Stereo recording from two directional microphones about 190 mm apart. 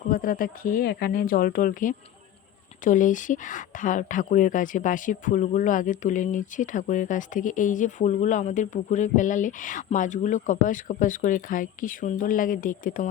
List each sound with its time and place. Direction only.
0.1 s speech: 45° left (ahead or behind)